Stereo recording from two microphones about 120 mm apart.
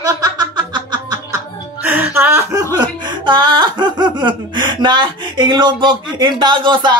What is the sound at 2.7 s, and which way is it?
Speech, 40° right (ahead or behind).